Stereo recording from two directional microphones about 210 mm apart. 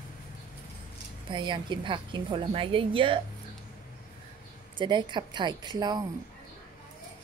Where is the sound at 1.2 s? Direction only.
20° right (ahead or behind).